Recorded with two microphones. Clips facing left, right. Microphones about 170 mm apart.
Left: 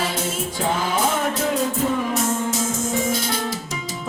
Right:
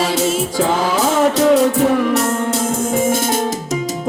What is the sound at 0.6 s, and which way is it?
Music, 90° right.